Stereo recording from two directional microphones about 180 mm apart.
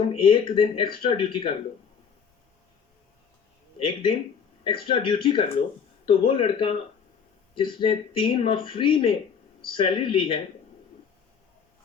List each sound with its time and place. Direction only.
0.1 s speech: 30° left (ahead or behind)
3.8 s speech: 30° left (ahead or behind)